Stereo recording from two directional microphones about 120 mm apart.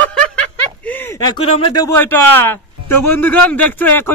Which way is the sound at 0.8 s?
15° left (ahead or behind).